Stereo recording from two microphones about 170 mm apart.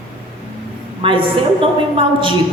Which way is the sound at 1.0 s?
30° right (ahead or behind).